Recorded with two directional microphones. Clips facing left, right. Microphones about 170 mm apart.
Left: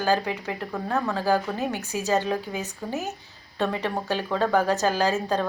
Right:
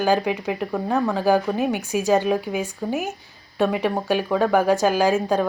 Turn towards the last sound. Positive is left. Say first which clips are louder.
# right 5 dB
turn(degrees=-15)  # may be behind; listen again after turning